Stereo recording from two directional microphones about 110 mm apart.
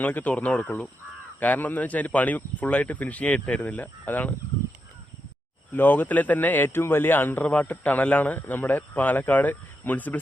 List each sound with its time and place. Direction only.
0.0 s a man's voice: 15° left (ahead or behind)
5.7 s a man's voice: 15° left (ahead or behind)